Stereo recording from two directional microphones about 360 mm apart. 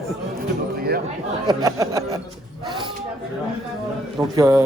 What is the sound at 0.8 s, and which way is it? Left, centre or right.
Chatter, right.